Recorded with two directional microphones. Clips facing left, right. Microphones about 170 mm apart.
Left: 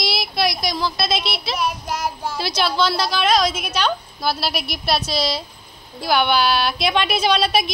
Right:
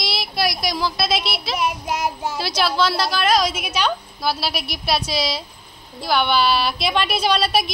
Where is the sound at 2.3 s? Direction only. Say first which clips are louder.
Left 2 dB; 5° right (ahead or behind).